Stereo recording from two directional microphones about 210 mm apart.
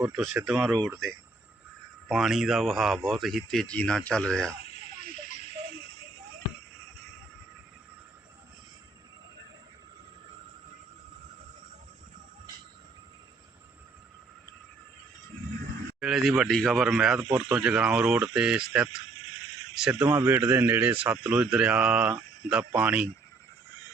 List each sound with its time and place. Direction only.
0.2 s speech: 5° right (ahead or behind)
2.0 s speech: centre (ahead or behind)
16.0 s speech: centre (ahead or behind)